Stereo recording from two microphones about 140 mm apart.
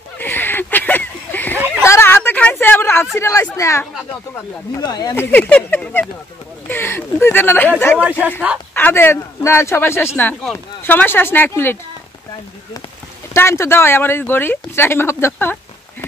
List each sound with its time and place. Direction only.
0.2 s a sound: 15° left (ahead or behind)
3.2 s speech: 20° left (ahead or behind)
5.1 s speech: 15° left (ahead or behind)
8.0 s speech: 10° right (ahead or behind)
8.7 s speech: 15° left (ahead or behind)
13.3 s speech: 20° left (ahead or behind)